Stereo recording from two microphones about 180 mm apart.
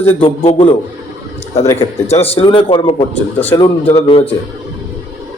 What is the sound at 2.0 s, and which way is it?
Speech, 35° left (ahead or behind).